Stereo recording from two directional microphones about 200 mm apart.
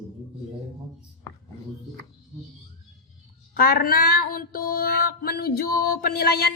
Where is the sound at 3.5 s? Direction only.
50° left (ahead or behind).